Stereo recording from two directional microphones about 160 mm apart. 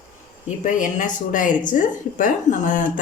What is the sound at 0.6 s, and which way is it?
A woman's voice, 55° left (ahead or behind).